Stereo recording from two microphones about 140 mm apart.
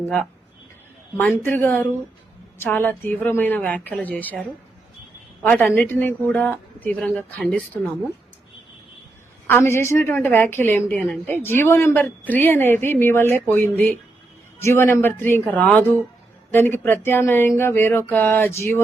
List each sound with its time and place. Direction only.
1.1 s speech: 15° left (ahead or behind)
5.4 s speech: 10° left (ahead or behind)
9.5 s speech: 15° left (ahead or behind)